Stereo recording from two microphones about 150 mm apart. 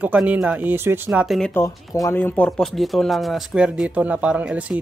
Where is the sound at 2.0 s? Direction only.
10° left (ahead or behind).